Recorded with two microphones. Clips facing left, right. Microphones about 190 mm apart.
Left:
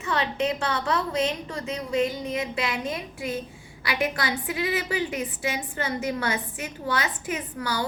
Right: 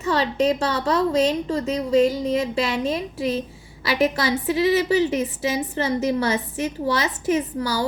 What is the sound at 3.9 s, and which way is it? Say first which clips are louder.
A woman's voice: right 7 dB; 35° right (ahead or behind).